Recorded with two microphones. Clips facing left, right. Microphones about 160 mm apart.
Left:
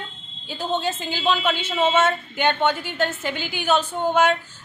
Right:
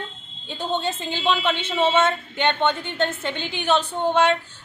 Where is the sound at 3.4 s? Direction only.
25° right (ahead or behind).